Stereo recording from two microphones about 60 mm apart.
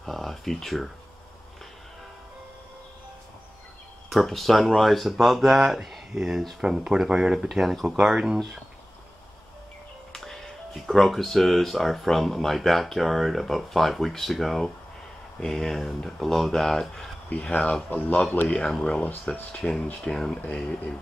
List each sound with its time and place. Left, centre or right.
0.0 s speech: centre
4.1 s speech: centre
10.1 s speech: centre
17.3 s a man's voice: left
18.7 s speech: centre